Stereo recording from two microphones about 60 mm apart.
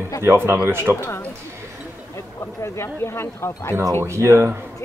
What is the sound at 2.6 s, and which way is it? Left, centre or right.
Speech, left.